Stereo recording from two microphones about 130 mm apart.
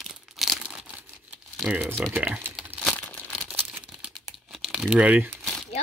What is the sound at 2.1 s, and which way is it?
Typing, 10° right (ahead or behind).